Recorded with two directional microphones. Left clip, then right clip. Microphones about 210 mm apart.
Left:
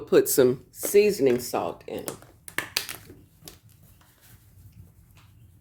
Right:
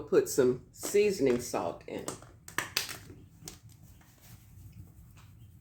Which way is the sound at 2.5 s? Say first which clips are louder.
Left 4 dB; 30° left (ahead or behind).